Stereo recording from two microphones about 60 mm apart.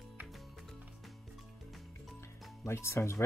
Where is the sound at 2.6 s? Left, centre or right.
Left.